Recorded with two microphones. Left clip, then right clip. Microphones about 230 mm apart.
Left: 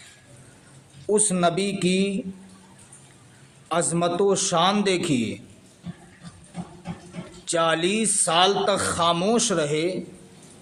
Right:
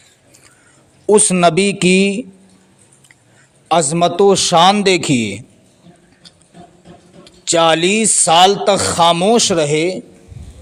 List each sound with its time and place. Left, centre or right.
1.0 s speech: right
3.7 s speech: right
7.4 s speech: right